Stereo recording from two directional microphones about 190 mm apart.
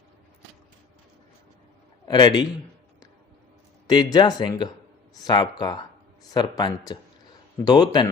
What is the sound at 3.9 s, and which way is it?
Speech, 20° left (ahead or behind).